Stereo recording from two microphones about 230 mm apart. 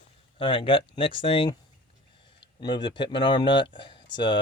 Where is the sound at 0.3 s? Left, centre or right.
Left.